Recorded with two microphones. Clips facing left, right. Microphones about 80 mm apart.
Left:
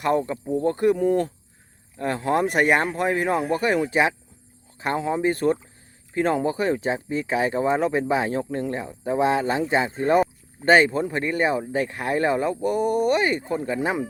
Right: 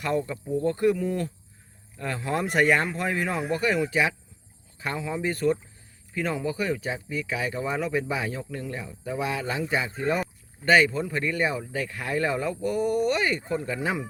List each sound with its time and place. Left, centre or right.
0.0 s speech: left
2.5 s speech: left
3.3 s speech: left
3.8 s speech: left
8.4 s speech: left